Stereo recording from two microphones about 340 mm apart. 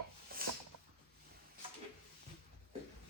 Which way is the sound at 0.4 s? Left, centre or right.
Right.